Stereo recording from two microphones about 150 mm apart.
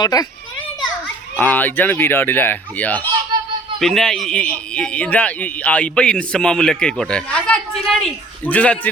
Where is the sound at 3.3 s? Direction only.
30° right (ahead or behind).